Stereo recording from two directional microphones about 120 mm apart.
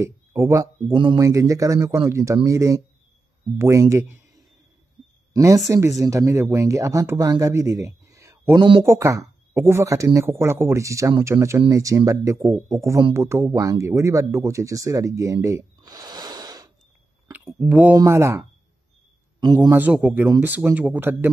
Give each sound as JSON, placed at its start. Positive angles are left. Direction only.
{"t": 0.0, "sound": "speech", "side_deg": -25}
{"t": 5.3, "sound": "speech", "side_deg": -25}
{"t": 8.5, "sound": "speech", "side_deg": -45}
{"t": 8.8, "sound": "speech", "side_deg": -25}
{"t": 17.6, "sound": "speech", "side_deg": -10}
{"t": 17.9, "sound": "speech", "side_deg": -25}
{"t": 19.4, "sound": "a man's voice", "side_deg": -35}
{"t": 19.7, "sound": "speech", "side_deg": -10}